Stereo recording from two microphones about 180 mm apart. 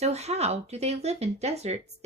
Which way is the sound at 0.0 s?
35° right (ahead or behind).